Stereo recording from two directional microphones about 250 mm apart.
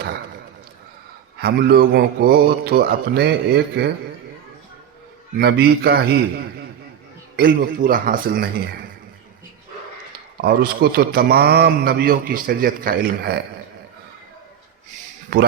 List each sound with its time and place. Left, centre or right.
1.4 s a man's voice: right
5.4 s a man's voice: right
7.3 s a man's voice: right
10.4 s a man's voice: right
15.3 s a man's voice: right